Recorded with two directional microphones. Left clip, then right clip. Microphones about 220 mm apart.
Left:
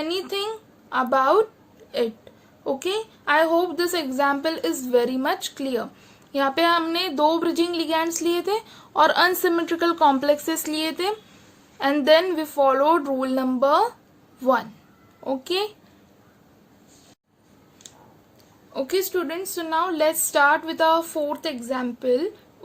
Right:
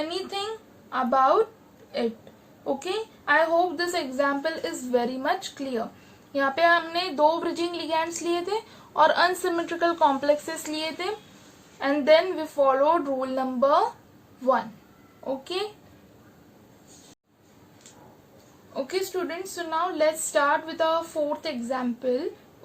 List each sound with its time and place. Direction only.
0.0 s a sound: 45° left (ahead or behind)
0.9 s a woman's voice: 45° left (ahead or behind)
2.6 s a woman's voice: 45° left (ahead or behind)
15.3 s a woman's voice: 45° left (ahead or behind)
18.7 s a woman's voice: 45° left (ahead or behind)